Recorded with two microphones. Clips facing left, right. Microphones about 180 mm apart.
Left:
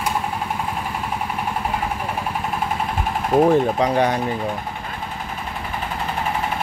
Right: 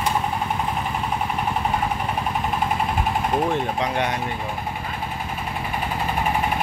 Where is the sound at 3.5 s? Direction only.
35° left (ahead or behind).